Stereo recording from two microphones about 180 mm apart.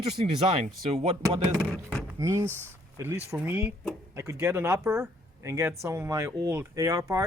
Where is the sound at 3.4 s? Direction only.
10° right (ahead or behind).